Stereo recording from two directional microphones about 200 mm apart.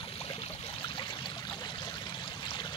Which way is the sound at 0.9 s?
25° left (ahead or behind).